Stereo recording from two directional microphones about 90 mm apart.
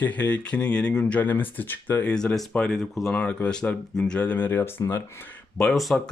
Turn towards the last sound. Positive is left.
turn(degrees=0)  # may be behind; listen again after turning